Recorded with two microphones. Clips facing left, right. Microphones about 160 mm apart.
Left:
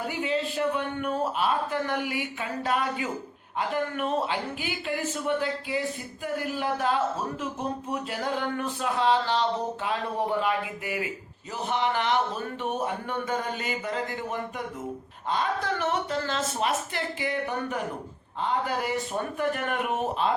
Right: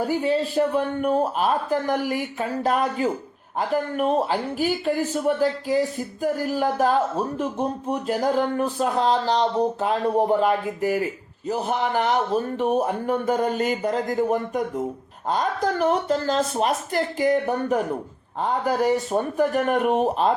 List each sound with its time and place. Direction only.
0.0 s speech: 40° right (ahead or behind)